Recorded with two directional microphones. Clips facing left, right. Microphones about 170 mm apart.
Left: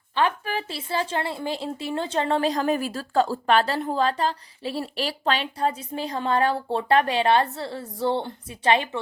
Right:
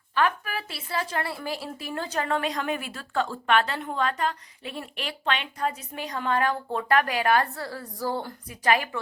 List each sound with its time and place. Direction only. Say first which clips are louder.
0.1 s a woman's voice: left 2 dB; 25° left (ahead or behind)